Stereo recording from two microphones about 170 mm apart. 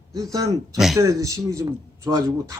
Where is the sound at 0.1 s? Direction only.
20° right (ahead or behind).